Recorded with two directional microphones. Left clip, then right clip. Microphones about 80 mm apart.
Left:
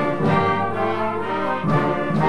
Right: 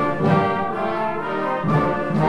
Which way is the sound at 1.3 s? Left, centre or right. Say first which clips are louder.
Even; centre.